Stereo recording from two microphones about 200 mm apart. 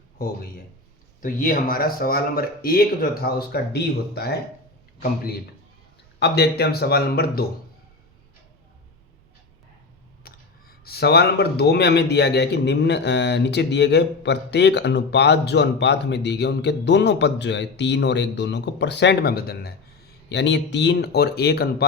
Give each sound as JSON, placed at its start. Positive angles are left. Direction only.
{"t": 0.2, "sound": "a man's voice", "side_deg": 50}
{"t": 10.3, "sound": "a sound", "side_deg": 50}
{"t": 10.8, "sound": "a man's voice", "side_deg": 55}
{"t": 20.3, "sound": "speech", "side_deg": 60}